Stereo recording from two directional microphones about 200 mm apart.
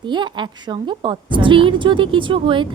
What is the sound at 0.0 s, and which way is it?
A woman's voice, 25° right (ahead or behind).